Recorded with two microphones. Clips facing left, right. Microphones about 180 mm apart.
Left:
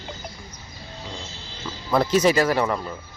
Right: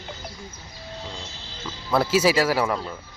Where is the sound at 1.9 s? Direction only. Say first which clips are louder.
Left 1 dB; 5° right (ahead or behind).